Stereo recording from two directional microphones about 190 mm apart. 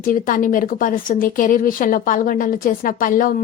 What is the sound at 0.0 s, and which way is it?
Speech, 45° left (ahead or behind).